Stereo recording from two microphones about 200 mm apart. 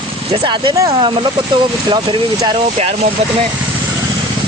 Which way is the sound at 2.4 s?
20° right (ahead or behind).